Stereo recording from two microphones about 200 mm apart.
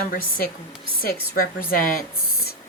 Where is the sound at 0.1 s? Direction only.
45° left (ahead or behind).